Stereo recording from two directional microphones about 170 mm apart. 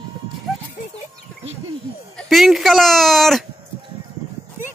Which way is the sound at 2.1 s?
Centre (ahead or behind).